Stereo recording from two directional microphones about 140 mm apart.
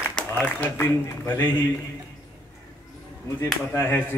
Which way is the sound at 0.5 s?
10° left (ahead or behind).